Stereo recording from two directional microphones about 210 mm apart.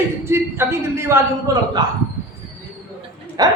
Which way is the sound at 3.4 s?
20° right (ahead or behind).